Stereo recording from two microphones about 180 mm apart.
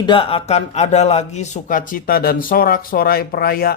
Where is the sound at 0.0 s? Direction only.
30° left (ahead or behind).